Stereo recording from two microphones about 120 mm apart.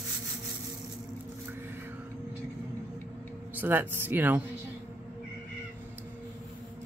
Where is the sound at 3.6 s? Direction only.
15° right (ahead or behind).